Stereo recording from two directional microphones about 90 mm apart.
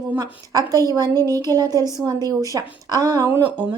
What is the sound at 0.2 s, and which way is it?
A woman's voice, 40° right (ahead or behind).